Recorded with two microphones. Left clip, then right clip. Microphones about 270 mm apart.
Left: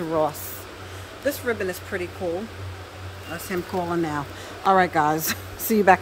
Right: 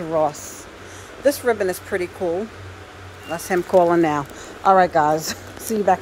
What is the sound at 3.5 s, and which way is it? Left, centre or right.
Speech, centre.